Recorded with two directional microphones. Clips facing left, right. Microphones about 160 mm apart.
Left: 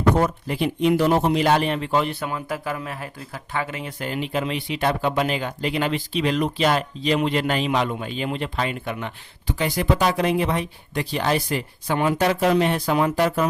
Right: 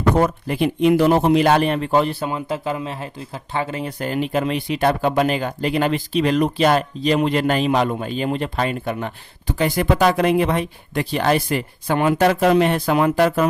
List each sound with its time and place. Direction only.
0.2 s speech: 55° right (ahead or behind)
1.5 s speech: 45° right (ahead or behind); by 13.5 s 65° right (ahead or behind)